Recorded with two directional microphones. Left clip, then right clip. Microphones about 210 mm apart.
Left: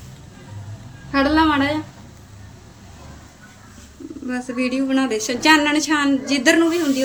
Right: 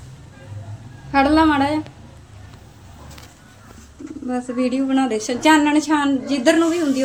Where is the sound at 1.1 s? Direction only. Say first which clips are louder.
Right 2 dB; 20° right (ahead or behind).